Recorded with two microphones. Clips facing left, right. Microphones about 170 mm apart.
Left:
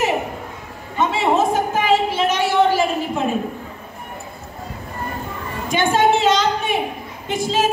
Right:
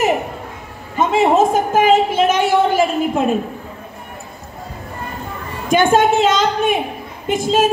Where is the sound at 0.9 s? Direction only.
45° right (ahead or behind).